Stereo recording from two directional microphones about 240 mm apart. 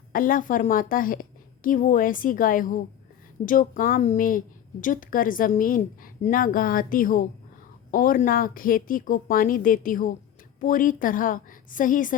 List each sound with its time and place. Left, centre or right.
0.1 s a woman's voice: left